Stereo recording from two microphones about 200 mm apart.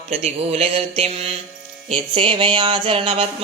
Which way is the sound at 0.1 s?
30° right (ahead or behind).